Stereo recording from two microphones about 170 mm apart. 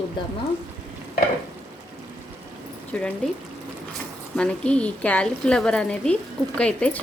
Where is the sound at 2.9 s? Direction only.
10° left (ahead or behind).